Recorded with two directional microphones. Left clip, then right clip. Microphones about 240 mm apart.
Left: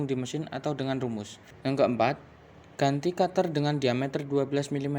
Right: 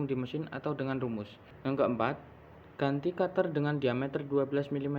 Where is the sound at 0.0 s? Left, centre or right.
Left.